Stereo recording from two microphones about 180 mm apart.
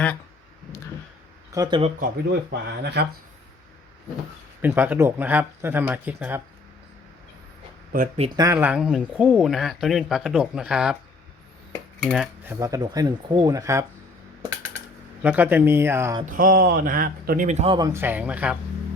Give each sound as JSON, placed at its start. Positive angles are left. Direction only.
{"t": 1.5, "sound": "speech", "side_deg": -25}
{"t": 2.0, "sound": "speech", "side_deg": -65}
{"t": 4.6, "sound": "speech", "side_deg": -10}
{"t": 7.9, "sound": "speech", "side_deg": -40}
{"t": 8.5, "sound": "speech", "side_deg": -5}
{"t": 12.0, "sound": "speech", "side_deg": -5}
{"t": 15.2, "sound": "speech", "side_deg": -10}
{"t": 16.3, "sound": "speech", "side_deg": -50}
{"t": 17.7, "sound": "speech", "side_deg": -15}